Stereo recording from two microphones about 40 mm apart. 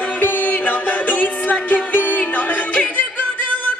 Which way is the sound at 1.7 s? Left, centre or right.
Left.